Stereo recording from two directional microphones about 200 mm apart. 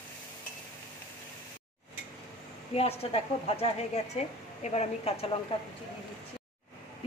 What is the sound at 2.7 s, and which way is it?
A woman's voice, 30° left (ahead or behind).